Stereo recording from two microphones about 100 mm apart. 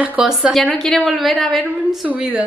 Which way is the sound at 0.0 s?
15° right (ahead or behind).